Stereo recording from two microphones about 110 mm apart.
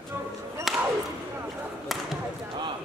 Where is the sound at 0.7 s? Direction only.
Centre (ahead or behind).